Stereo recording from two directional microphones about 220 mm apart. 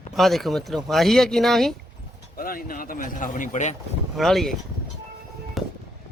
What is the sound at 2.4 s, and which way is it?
Speech, 40° left (ahead or behind).